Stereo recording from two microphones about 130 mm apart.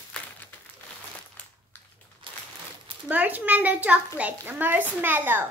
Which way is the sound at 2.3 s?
40° right (ahead or behind).